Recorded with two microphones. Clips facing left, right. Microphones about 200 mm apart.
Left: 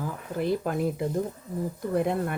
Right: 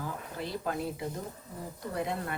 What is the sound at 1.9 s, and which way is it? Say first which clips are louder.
Speech: left 8 dB; 55° left (ahead or behind).